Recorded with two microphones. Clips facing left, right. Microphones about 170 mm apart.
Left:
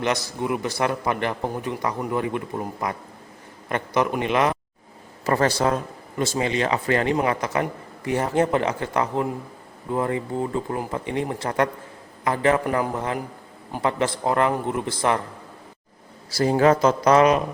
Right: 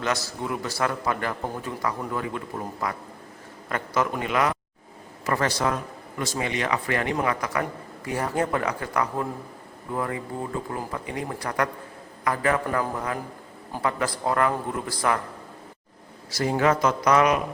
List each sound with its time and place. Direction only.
0.0 s a man's voice: 20° left (ahead or behind)
16.3 s speech: 35° left (ahead or behind)